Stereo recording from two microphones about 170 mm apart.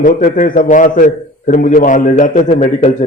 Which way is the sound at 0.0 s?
50° left (ahead or behind).